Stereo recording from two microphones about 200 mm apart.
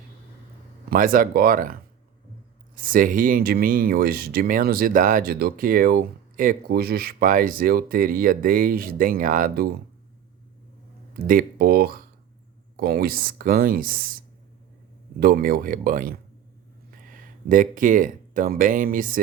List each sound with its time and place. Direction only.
0.9 s speech: 45° right (ahead or behind)
11.1 s speech: 45° right (ahead or behind)
15.2 s speech: 50° right (ahead or behind)